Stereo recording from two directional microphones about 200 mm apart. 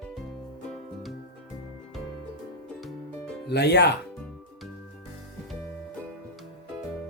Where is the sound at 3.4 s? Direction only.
55° left (ahead or behind).